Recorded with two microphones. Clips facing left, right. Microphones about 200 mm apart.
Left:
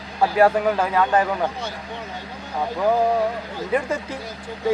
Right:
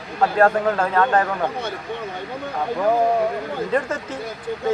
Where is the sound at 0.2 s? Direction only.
10° left (ahead or behind).